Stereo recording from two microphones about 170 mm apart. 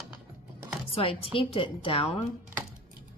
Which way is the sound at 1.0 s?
35° left (ahead or behind).